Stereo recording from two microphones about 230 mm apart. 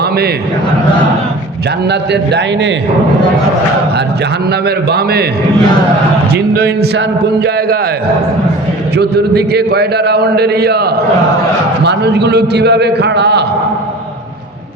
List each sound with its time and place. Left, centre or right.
1.9 s a man's voice: right
4.6 s a man's voice: right
6.3 s a man's voice: right
9.0 s a man's voice: right